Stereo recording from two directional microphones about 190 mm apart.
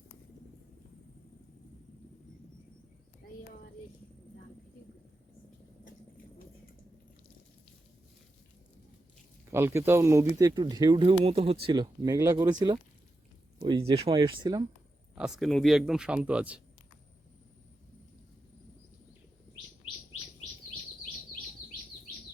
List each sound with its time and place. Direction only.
9.5 s speech: 10° right (ahead or behind)
15.1 s speech: centre (ahead or behind)